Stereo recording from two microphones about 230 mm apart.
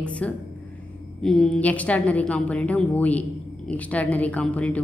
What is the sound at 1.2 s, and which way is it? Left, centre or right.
A woman's voice, centre.